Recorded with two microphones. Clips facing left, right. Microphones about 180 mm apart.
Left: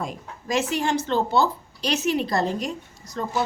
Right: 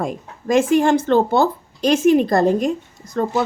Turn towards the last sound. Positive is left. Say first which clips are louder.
# right 7 dB
turn(degrees=-55)  # may be behind; listen again after turning